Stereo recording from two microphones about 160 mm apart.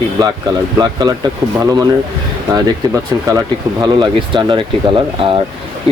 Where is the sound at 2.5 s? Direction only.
20° right (ahead or behind).